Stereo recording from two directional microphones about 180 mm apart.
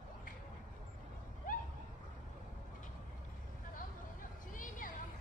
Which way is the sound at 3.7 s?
50° left (ahead or behind).